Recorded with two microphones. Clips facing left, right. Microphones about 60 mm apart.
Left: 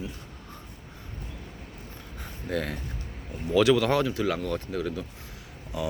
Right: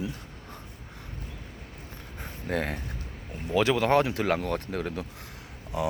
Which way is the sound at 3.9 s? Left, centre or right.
Right.